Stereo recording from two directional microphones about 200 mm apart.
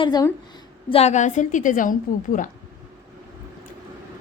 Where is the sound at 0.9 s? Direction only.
35° left (ahead or behind).